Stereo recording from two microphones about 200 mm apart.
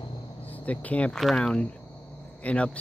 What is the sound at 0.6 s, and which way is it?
Speech, 5° left (ahead or behind).